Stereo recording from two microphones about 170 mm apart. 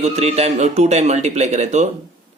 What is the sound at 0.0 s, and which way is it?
Speech, 40° right (ahead or behind).